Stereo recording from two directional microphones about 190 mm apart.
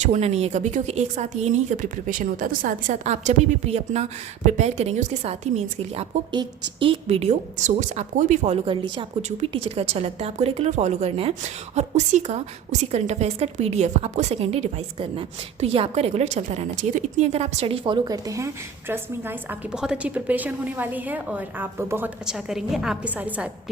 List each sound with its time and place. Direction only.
0.0 s a woman's voice: 35° right (ahead or behind); by 23.5 s 10° right (ahead or behind)